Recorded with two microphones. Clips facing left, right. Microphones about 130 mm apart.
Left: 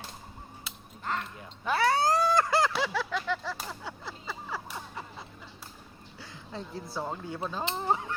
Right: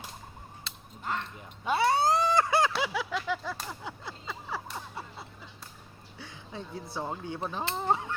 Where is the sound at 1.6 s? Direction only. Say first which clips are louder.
Even; 25° right (ahead or behind).